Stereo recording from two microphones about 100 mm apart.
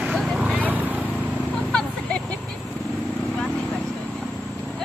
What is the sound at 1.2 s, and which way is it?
Vehicle, 10° left (ahead or behind).